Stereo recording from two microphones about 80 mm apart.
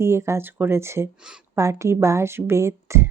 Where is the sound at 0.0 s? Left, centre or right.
Right.